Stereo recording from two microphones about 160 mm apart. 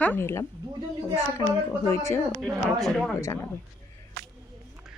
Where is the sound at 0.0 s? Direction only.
10° left (ahead or behind).